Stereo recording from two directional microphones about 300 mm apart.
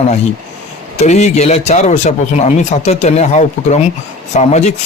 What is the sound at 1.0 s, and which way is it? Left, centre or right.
Speech, left.